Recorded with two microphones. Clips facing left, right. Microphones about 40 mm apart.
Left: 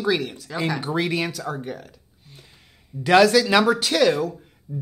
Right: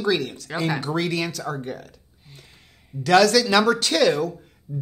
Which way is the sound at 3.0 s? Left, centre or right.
Centre.